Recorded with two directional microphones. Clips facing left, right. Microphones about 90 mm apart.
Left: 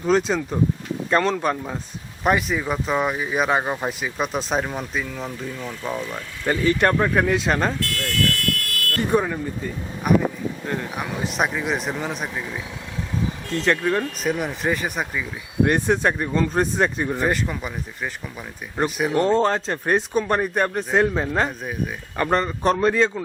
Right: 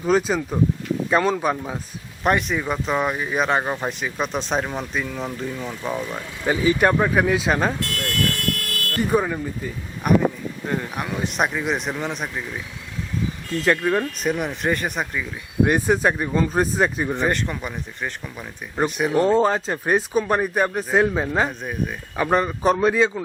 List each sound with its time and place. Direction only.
0.0 s speech: 5° right (ahead or behind)
7.8 s car alarm: 20° right (ahead or behind)
9.0 s speech: centre (ahead or behind)
13.5 s speech: 5° right (ahead or behind)